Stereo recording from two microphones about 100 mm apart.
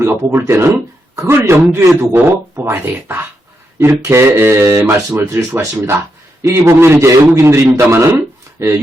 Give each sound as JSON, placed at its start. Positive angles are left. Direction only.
{"t": 0.0, "sound": "a man's voice", "side_deg": -25}